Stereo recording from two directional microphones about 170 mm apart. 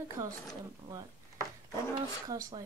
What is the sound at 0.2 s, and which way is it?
Speech, 20° right (ahead or behind).